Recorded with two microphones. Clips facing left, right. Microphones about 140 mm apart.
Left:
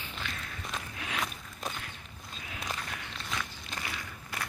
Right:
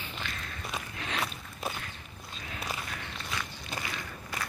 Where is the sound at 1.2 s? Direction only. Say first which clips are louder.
Right 2 dB; 5° right (ahead or behind).